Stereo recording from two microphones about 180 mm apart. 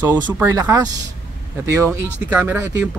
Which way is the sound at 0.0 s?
10° right (ahead or behind).